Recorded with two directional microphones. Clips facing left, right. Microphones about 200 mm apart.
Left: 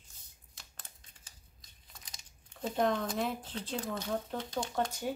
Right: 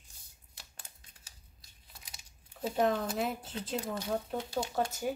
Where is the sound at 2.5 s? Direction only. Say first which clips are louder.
Right 1 dB; 5° right (ahead or behind).